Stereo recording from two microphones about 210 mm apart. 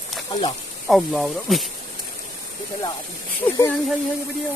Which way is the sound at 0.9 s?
Centre (ahead or behind).